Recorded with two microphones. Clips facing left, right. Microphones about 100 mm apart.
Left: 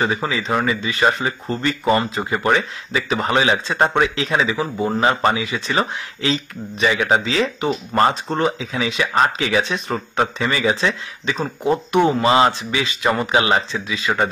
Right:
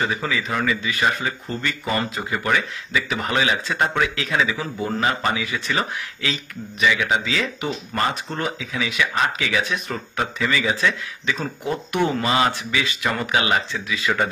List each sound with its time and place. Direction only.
0.0 s speech: 30° left (ahead or behind)